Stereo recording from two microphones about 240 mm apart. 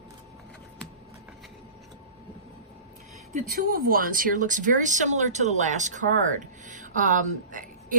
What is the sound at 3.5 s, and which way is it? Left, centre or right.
Speech, right.